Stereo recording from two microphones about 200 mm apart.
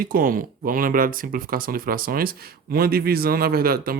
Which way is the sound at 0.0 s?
45° right (ahead or behind).